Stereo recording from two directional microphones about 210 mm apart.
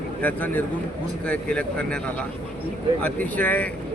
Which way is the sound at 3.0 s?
5° left (ahead or behind).